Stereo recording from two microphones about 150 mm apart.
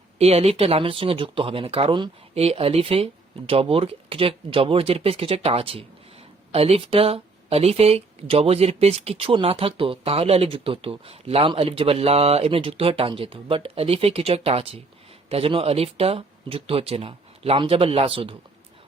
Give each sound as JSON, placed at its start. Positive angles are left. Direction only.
{"t": 0.2, "sound": "speech", "side_deg": -45}